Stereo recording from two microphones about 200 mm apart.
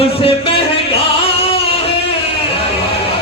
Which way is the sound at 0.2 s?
25° left (ahead or behind).